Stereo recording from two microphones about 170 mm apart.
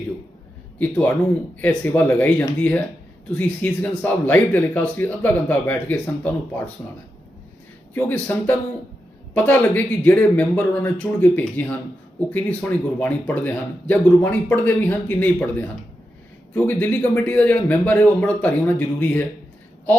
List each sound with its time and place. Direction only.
0.8 s speech: 10° left (ahead or behind)
7.9 s speech: 10° left (ahead or behind)
16.6 s speech: 10° left (ahead or behind)